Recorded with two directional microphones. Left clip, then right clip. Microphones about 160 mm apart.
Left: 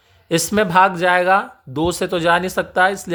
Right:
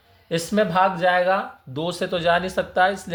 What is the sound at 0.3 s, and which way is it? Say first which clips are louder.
Speech: left 4 dB; 55° left (ahead or behind).